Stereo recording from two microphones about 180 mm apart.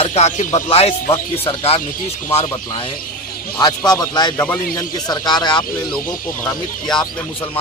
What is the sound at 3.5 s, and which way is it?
Speech, 20° left (ahead or behind).